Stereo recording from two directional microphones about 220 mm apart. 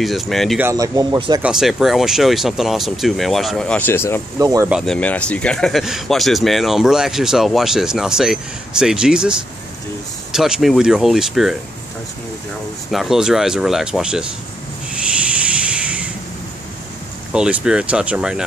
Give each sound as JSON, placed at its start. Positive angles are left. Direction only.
{"t": 0.0, "sound": "speech", "side_deg": 0}
{"t": 0.7, "sound": "speech", "side_deg": -15}
{"t": 1.4, "sound": "speech", "side_deg": 0}
{"t": 4.4, "sound": "speech", "side_deg": -15}
{"t": 4.6, "sound": "speech", "side_deg": 0}
{"t": 12.9, "sound": "speech", "side_deg": 0}
{"t": 14.9, "sound": "a sound", "side_deg": -5}
{"t": 17.3, "sound": "speech", "side_deg": -5}